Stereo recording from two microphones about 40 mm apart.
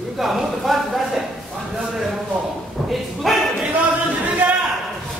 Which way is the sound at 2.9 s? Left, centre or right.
Centre.